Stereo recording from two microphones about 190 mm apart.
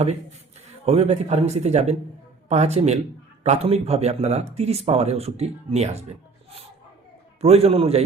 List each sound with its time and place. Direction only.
0.9 s speech: 35° right (ahead or behind)
7.4 s speech: 30° right (ahead or behind)